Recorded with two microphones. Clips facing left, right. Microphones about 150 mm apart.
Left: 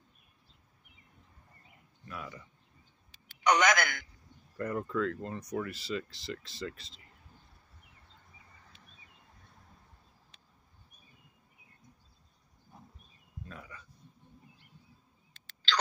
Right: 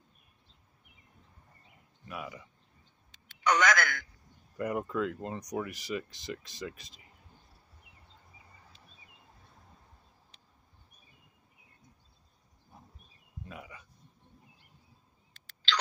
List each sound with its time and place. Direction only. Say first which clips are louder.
2.0 s speech: right 2 dB; 10° right (ahead or behind)
3.4 s a man's voice: left 1 dB; 15° left (ahead or behind)
4.6 s speech: right 1 dB; 15° right (ahead or behind)
13.5 s a sound: right 2 dB; 15° right (ahead or behind)